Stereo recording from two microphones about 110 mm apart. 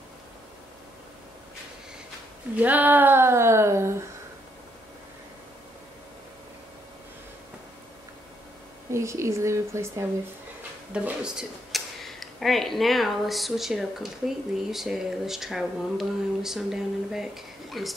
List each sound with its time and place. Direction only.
2.5 s a woman's voice: 15° right (ahead or behind)
8.9 s a woman's voice: 25° right (ahead or behind)
10.9 s speech: 10° right (ahead or behind)